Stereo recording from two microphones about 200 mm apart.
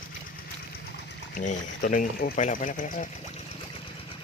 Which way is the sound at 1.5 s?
40° left (ahead or behind).